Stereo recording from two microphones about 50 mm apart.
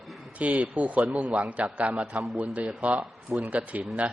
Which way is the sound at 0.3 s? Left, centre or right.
Right.